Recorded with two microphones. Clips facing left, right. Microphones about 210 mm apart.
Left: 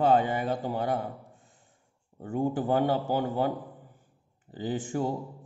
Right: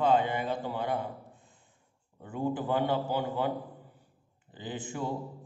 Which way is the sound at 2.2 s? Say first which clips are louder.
Left 4 dB; 45° left (ahead or behind).